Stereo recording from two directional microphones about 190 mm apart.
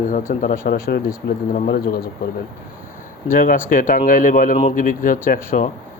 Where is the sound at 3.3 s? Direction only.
45° left (ahead or behind).